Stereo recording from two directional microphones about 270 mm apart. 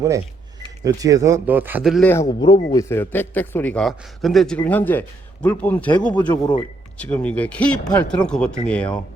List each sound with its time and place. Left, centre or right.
0.9 s speech: centre
2.2 s a man's voice: centre